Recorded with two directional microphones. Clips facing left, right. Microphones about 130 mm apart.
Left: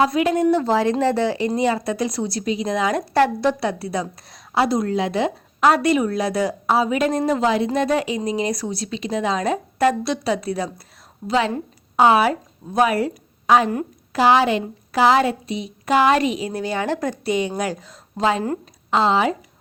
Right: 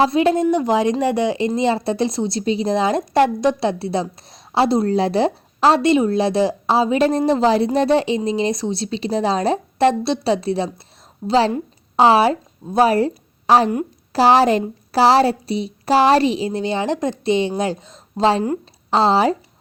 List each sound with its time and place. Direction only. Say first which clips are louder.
0.0 s speech: right 3 dB; 30° right (ahead or behind)
0.5 s a woman's voice: right 1 dB; 15° right (ahead or behind); by 19.4 s 35° right (ahead or behind)